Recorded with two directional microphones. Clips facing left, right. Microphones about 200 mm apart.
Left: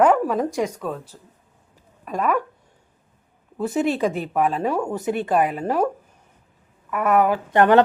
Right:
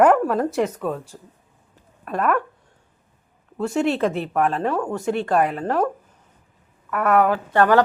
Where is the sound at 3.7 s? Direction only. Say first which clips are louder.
Right 1 dB; centre (ahead or behind).